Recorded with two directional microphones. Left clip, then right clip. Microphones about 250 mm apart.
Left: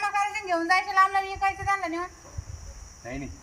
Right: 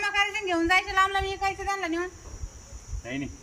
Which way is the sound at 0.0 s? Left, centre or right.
Centre.